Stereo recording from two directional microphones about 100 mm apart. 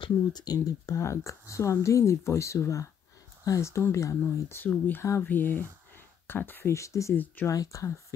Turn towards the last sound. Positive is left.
turn(degrees=35)  # may be behind; listen again after turning